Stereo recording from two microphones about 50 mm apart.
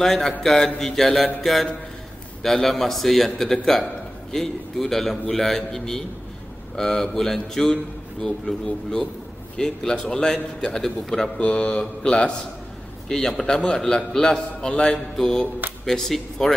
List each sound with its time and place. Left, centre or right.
0.0 s a man's voice: centre
9.6 s a man's voice: centre
11.3 s mantra: centre
11.8 s a man's voice: centre